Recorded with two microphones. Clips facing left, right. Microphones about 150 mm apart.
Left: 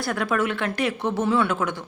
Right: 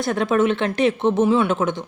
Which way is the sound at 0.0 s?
25° right (ahead or behind).